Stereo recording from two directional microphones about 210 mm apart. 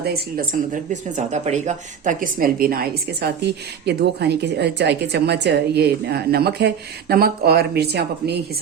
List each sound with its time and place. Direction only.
0.0 s speech: 45° right (ahead or behind)